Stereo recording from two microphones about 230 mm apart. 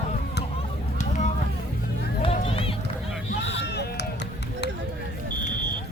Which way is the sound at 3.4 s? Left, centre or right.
Left.